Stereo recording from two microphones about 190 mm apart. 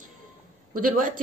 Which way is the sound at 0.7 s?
45° right (ahead or behind).